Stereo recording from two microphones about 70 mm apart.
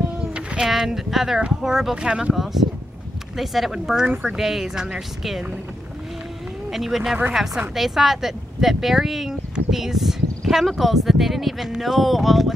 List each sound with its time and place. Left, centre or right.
0.6 s speech: centre
2.0 s speech: centre
2.3 s speech: centre
6.7 s speech: centre